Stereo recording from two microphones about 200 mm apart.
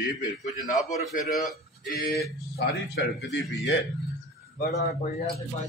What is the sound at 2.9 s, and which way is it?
Speech, 65° left (ahead or behind).